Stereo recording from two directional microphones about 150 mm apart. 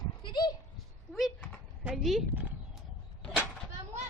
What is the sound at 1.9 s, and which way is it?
Speech, centre (ahead or behind).